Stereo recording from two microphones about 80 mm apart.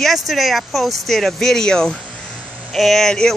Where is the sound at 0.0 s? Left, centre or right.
Centre.